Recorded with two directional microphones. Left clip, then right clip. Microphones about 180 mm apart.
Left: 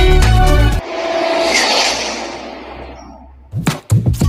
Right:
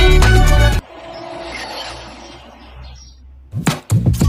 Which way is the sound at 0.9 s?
60° left (ahead or behind).